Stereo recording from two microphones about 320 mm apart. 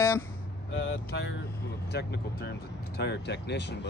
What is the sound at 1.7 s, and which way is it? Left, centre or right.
Speech, left.